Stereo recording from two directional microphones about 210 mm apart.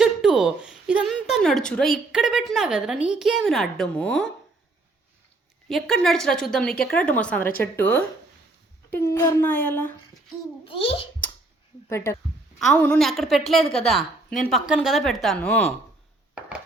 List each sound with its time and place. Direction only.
0.0 s a woman's voice: centre (ahead or behind)
5.6 s a woman's voice: centre (ahead or behind)
10.7 s a child's voice: 25° left (ahead or behind)
11.9 s a woman's voice: 15° left (ahead or behind)